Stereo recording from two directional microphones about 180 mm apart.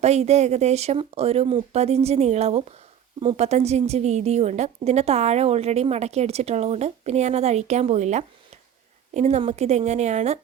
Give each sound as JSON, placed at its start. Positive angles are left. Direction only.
{"t": 0.0, "sound": "a woman's voice", "side_deg": -35}